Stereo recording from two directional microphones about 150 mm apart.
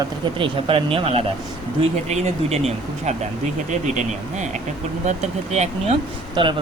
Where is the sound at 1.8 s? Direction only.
45° right (ahead or behind).